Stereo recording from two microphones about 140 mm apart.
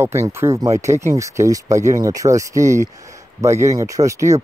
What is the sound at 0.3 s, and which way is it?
Speech, 20° right (ahead or behind).